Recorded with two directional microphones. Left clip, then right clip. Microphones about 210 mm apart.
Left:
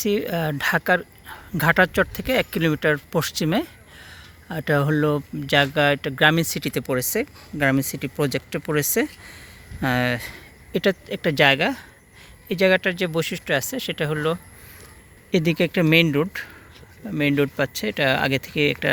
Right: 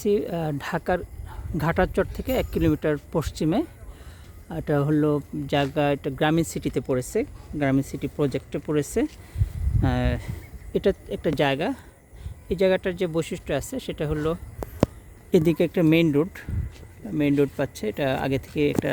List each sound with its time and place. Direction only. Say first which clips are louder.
0.0 s speech: left 1 dB; centre (ahead or behind)
15.3 s speech: right 1 dB; 20° right (ahead or behind)
15.5 s speech: left 2 dB; 5° right (ahead or behind)